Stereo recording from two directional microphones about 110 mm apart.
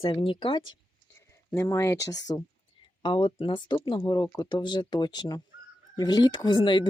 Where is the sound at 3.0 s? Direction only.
50° left (ahead or behind).